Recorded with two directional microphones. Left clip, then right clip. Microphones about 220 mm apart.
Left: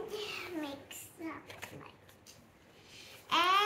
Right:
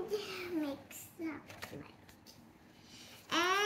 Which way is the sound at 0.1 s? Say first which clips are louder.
Right 1 dB; 10° left (ahead or behind).